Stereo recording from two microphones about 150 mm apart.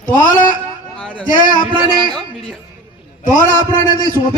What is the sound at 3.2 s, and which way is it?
Speech, 60° left (ahead or behind).